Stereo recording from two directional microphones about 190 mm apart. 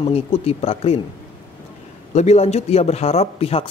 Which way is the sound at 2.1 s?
35° left (ahead or behind).